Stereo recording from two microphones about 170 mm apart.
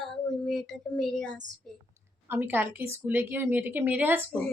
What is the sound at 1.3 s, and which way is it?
Speech, 90° right.